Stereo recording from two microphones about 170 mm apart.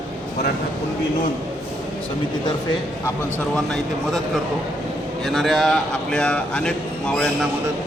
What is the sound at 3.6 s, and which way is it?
Speech, 5° left (ahead or behind).